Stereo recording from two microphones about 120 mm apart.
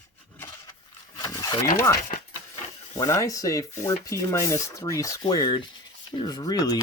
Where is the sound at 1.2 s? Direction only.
30° left (ahead or behind).